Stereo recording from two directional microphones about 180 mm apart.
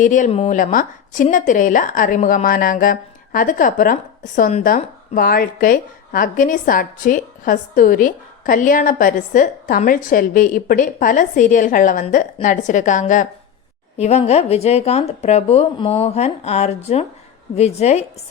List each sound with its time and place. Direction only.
0.0 s a woman's voice: 45° left (ahead or behind)